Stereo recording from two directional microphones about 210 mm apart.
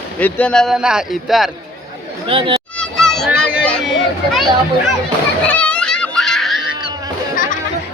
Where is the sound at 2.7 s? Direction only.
5° left (ahead or behind).